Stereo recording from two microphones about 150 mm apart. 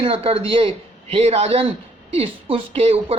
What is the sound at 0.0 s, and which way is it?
A woman's voice, 40° right (ahead or behind).